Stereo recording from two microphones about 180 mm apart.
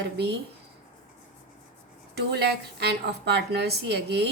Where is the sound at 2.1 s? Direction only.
65° right (ahead or behind).